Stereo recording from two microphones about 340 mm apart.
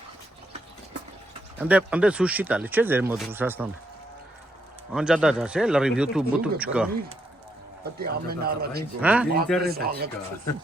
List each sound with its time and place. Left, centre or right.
1.5 s speech: centre
4.9 s speech: centre
7.9 s speech: right
9.0 s speech: centre
9.6 s speech: right